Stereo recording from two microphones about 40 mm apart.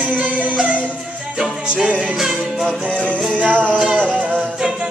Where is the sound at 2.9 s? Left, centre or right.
Left.